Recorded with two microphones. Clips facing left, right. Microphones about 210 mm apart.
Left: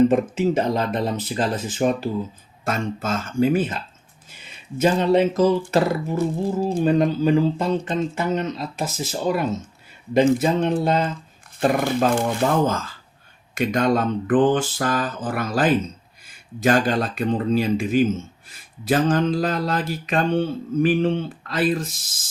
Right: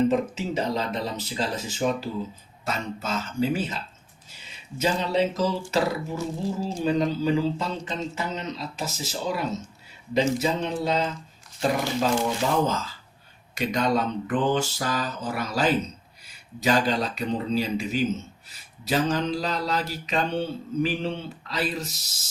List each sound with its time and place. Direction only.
0.1 s speech: 55° left (ahead or behind)
4.8 s speech: 55° left (ahead or behind)